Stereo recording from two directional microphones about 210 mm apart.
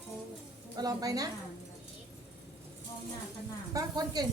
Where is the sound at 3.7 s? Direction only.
20° right (ahead or behind).